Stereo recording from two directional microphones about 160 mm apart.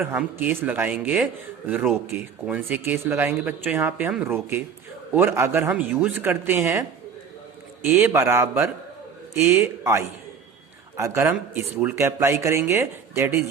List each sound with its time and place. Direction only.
0.0 s speech: 15° right (ahead or behind)
7.9 s speech: 15° right (ahead or behind)